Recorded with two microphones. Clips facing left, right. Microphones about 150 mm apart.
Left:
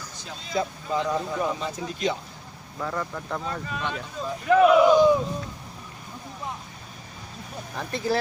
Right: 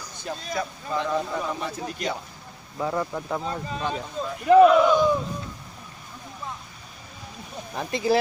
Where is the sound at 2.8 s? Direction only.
20° right (ahead or behind).